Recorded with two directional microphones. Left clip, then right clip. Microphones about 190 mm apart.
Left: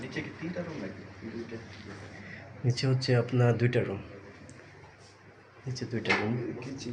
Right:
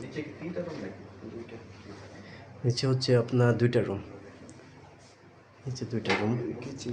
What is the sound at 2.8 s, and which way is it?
A man's voice, 20° right (ahead or behind).